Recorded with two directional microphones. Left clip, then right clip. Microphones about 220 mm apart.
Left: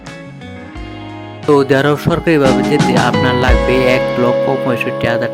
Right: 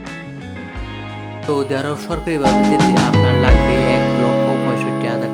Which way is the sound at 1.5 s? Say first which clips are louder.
Left 9 dB; 25° left (ahead or behind).